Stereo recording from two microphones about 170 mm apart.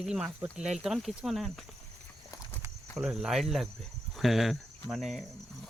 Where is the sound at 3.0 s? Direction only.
5° right (ahead or behind).